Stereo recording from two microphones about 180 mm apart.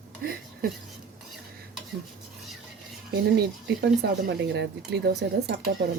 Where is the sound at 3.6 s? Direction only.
70° right (ahead or behind).